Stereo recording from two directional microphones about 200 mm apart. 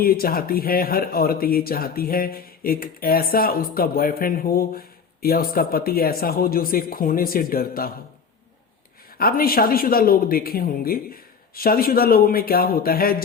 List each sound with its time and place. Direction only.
0.0 s speech: 45° left (ahead or behind)
9.1 s speech: 50° left (ahead or behind)